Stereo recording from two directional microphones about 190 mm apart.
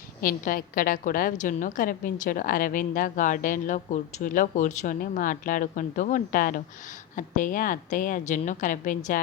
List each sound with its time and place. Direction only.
0.2 s a woman's voice: 45° left (ahead or behind)